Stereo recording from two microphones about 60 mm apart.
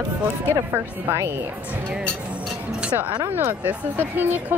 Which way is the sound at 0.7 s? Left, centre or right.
Right.